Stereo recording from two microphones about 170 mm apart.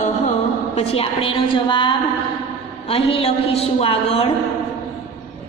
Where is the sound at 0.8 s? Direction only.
35° left (ahead or behind).